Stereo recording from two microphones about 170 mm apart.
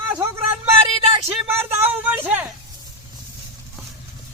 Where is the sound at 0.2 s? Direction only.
15° right (ahead or behind).